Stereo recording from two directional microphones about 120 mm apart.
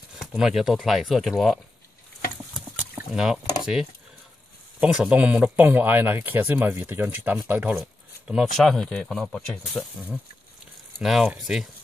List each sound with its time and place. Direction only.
0.2 s speech: 5° right (ahead or behind)
3.1 s speech: 5° right (ahead or behind)
7.7 s speech: 5° right (ahead or behind)